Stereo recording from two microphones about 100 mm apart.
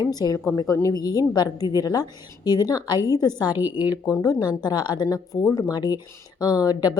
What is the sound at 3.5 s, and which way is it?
Speech, 20° right (ahead or behind).